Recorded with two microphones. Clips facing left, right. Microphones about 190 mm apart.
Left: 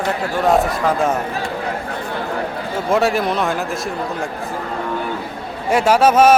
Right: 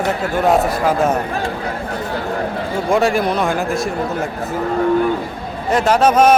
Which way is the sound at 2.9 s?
Centre (ahead or behind).